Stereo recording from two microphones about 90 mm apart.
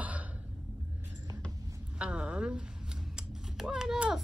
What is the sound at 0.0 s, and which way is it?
Cough, 15° right (ahead or behind).